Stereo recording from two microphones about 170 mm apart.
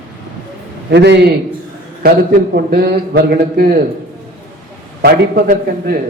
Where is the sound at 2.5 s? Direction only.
65° right (ahead or behind).